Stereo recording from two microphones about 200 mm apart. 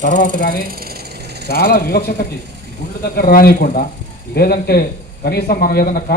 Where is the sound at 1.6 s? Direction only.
50° left (ahead or behind).